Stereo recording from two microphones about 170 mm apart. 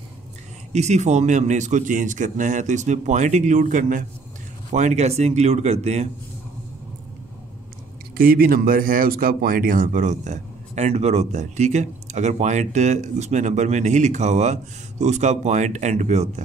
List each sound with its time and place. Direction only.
0.7 s speech: 40° right (ahead or behind)
8.2 s speech: 60° right (ahead or behind); by 16.4 s 40° right (ahead or behind)